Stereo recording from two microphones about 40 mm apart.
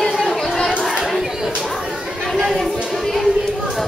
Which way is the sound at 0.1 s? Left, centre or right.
Centre.